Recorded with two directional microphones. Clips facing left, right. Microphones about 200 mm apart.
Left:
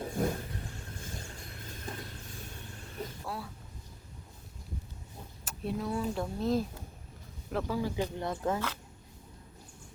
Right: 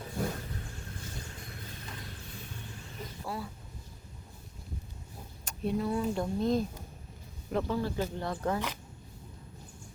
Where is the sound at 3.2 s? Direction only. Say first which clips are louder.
Right 5 dB; centre (ahead or behind).